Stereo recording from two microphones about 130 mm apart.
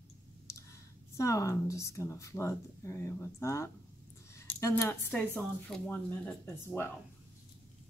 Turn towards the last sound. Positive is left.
turn(degrees=15)  # may be behind; listen again after turning